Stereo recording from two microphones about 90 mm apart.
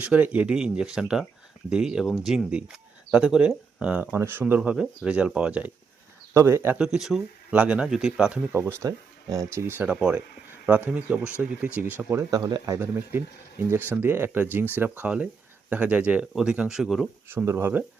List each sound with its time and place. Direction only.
0.0 s speech: 15° right (ahead or behind)
4.0 s speech: 25° right (ahead or behind)
4.7 s speech: 10° right (ahead or behind)
6.3 s speech: 30° right (ahead or behind)
6.7 s speech: 5° right (ahead or behind)
8.8 s speech: 40° right (ahead or behind); by 9.9 s 25° right (ahead or behind)
9.9 s speech: 10° right (ahead or behind)
12.3 s speech: 45° right (ahead or behind)
12.8 s speech: 25° right (ahead or behind); by 17.1 s 5° right (ahead or behind)
17.2 s speech: 25° right (ahead or behind)